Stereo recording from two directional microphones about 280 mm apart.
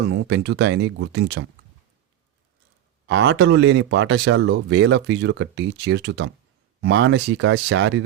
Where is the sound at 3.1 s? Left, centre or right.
Right.